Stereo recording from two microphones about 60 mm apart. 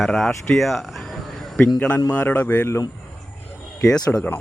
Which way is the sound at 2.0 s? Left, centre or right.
Left.